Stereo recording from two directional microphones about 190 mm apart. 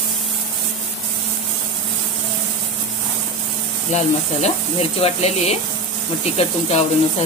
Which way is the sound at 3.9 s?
35° left (ahead or behind).